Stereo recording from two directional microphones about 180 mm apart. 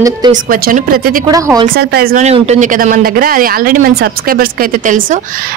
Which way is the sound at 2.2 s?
40° right (ahead or behind).